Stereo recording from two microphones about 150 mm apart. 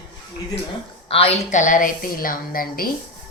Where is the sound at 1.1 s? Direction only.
40° left (ahead or behind).